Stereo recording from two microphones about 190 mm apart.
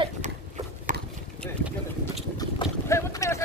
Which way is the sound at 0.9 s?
45° right (ahead or behind).